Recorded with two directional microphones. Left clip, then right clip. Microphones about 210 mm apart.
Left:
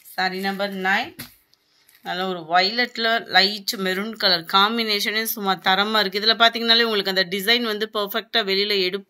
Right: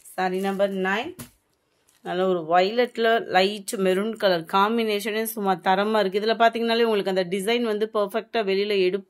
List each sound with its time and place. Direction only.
0.1 s speech: 55° right (ahead or behind)
2.0 s speech: 50° right (ahead or behind)